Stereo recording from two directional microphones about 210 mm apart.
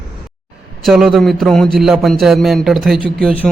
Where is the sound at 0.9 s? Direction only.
Centre (ahead or behind).